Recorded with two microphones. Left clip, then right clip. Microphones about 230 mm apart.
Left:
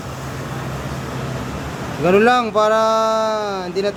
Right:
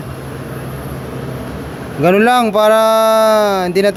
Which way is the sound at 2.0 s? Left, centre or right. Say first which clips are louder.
Right 3 dB; right.